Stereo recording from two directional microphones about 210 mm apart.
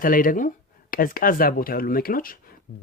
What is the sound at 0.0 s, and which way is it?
Speech, 40° left (ahead or behind).